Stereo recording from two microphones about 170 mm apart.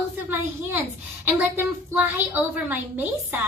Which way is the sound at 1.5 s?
10° right (ahead or behind).